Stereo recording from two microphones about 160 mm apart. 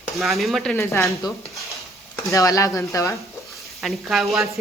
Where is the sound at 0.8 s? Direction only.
20° left (ahead or behind).